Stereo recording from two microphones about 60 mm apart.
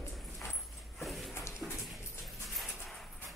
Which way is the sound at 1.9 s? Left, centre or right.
Centre.